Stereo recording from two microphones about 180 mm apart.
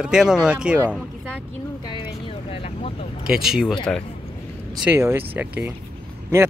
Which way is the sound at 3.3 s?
5° right (ahead or behind).